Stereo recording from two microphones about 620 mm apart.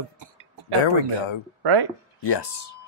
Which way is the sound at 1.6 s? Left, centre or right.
Right.